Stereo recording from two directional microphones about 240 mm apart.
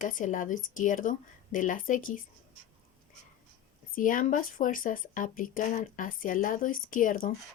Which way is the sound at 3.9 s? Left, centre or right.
Left.